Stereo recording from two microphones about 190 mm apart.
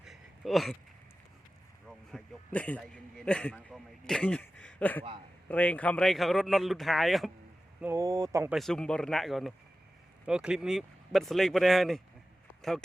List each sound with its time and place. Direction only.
0.0 s a sound: centre (ahead or behind)
1.9 s speech: 5° left (ahead or behind)
7.8 s speech: 15° right (ahead or behind)
8.5 s speech: 5° left (ahead or behind)